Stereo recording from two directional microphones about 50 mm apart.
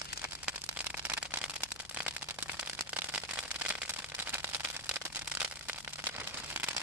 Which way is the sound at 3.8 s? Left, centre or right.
Right.